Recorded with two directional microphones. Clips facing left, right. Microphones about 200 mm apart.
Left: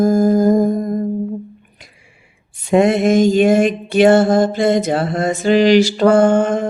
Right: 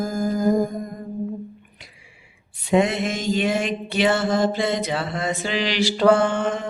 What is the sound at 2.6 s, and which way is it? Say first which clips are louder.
Mantra: left 6 dB; 50° left (ahead or behind).